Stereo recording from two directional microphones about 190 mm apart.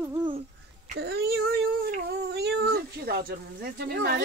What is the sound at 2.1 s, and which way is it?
Speech, 60° right (ahead or behind).